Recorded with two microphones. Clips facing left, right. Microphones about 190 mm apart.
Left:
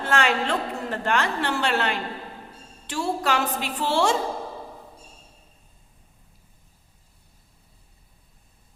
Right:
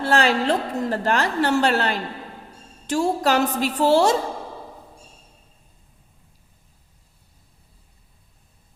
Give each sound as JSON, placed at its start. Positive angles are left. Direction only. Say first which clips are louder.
{"t": 0.0, "sound": "a woman's voice", "louder": "right 4 dB", "side_deg": -35}